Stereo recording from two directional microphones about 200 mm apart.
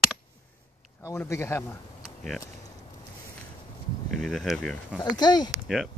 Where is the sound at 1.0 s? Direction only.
15° left (ahead or behind).